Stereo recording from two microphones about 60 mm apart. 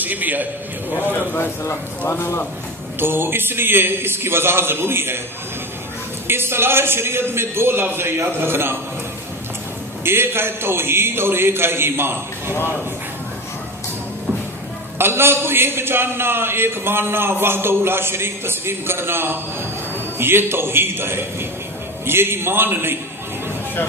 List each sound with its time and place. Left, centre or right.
0.0 s a man's voice: right
0.9 s speech: left
3.0 s a man's voice: right
6.2 s a man's voice: right
10.0 s a man's voice: right
14.9 s a man's voice: right